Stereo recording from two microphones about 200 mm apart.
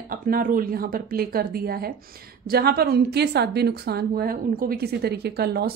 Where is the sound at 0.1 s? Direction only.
45° right (ahead or behind).